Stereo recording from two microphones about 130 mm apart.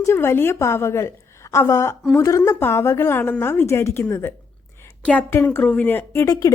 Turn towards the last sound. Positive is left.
turn(degrees=25)  # may be behind; listen again after turning